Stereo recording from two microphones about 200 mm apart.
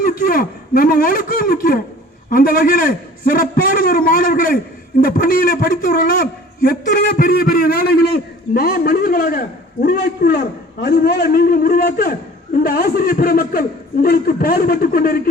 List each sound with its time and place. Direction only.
0.0 s a man's voice: 45° left (ahead or behind)